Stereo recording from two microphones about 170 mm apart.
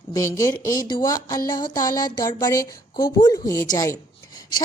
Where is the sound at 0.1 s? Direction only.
20° left (ahead or behind).